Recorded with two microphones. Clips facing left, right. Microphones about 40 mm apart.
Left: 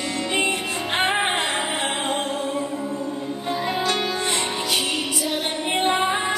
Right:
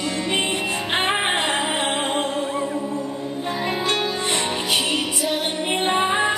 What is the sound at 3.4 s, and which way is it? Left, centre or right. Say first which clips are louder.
Music: even; right.